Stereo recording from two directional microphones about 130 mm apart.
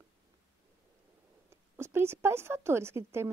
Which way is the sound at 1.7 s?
20° right (ahead or behind).